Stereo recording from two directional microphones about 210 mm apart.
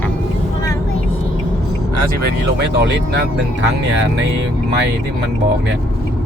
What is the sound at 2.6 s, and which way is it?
Speech, 55° right (ahead or behind).